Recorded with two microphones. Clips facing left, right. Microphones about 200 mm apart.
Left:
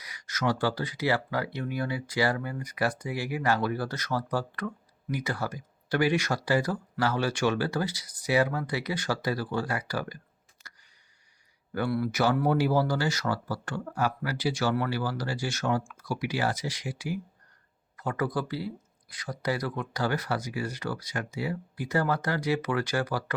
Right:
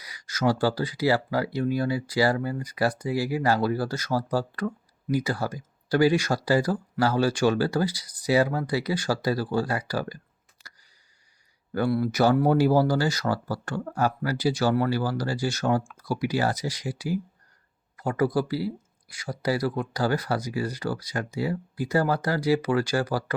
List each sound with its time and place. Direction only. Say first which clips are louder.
0.0 s speech: right 5 dB; 35° right (ahead or behind)
10.6 s a sound: right 1 dB; 35° right (ahead or behind)
11.9 s speech: right 5 dB; 30° right (ahead or behind)